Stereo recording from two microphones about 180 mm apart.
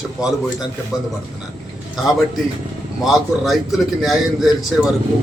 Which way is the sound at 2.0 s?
Centre (ahead or behind).